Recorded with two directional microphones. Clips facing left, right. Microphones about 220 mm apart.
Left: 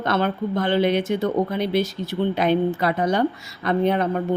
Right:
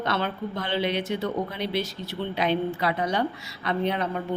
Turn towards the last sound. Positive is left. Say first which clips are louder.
# left 6 dB
turn(degrees=50)  # may be behind; listen again after turning